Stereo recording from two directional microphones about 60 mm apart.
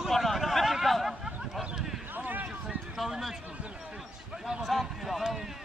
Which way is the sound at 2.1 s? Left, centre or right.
Right.